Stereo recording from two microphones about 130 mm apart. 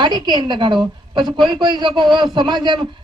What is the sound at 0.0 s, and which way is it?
A woman's voice, 35° right (ahead or behind).